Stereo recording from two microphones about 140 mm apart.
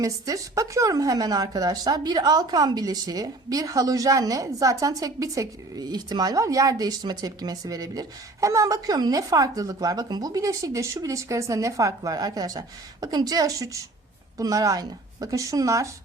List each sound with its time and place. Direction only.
0.0 s a woman's voice: 25° right (ahead or behind)